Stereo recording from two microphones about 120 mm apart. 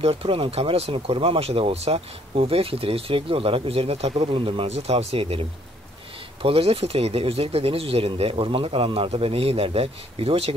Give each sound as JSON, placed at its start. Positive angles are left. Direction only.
{"t": 0.0, "sound": "speech", "side_deg": -55}